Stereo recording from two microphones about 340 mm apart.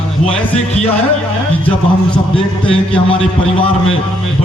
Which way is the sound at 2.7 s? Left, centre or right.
Centre.